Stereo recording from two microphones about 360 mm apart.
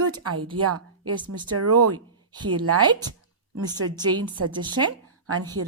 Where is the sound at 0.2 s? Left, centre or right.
Right.